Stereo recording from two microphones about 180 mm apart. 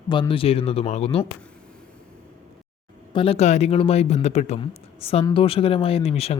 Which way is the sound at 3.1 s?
35° left (ahead or behind).